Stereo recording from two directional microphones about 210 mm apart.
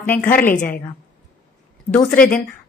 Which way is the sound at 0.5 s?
40° left (ahead or behind).